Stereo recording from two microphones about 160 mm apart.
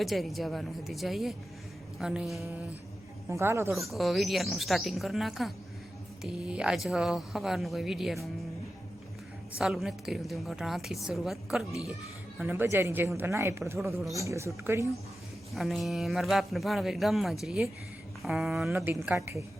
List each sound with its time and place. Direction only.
0.0 s speech: centre (ahead or behind)
3.2 s speech: 15° right (ahead or behind)
3.7 s speech: centre (ahead or behind)
9.6 s speech: centre (ahead or behind)
12.4 s speech: 10° right (ahead or behind)
15.5 s speech: centre (ahead or behind)
18.9 s speech: 15° right (ahead or behind)